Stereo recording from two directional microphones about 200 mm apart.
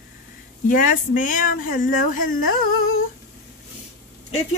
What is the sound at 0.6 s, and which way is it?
Speech, 40° left (ahead or behind).